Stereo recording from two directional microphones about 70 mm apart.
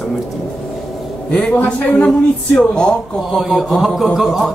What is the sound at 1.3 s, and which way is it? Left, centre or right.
Speech, centre.